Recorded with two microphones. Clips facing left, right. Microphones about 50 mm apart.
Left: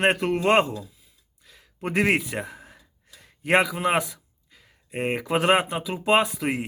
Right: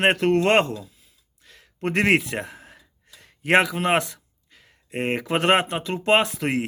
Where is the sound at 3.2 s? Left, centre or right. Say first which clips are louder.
Right 2 dB; right.